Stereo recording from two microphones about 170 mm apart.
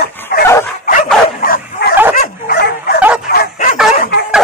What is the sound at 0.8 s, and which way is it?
Bow-wow, 50° left (ahead or behind).